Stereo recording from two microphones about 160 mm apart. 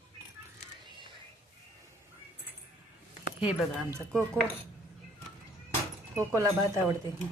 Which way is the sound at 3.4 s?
5° right (ahead or behind).